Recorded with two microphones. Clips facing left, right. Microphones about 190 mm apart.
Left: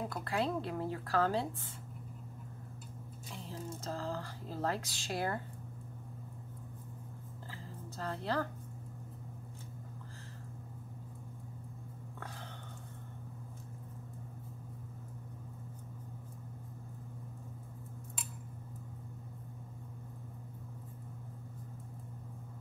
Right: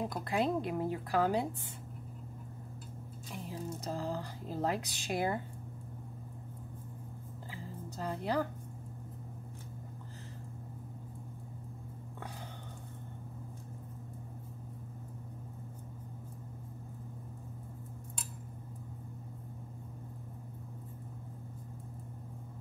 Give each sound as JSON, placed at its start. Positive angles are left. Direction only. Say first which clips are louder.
{"t": 0.0, "sound": "speech", "louder": "right 3 dB", "side_deg": -15}
{"t": 3.4, "sound": "speech", "louder": "right 2 dB", "side_deg": -15}
{"t": 7.5, "sound": "music", "louder": "right 3 dB", "side_deg": -15}